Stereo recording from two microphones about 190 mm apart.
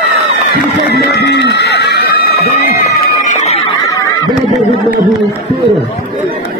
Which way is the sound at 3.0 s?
40° left (ahead or behind).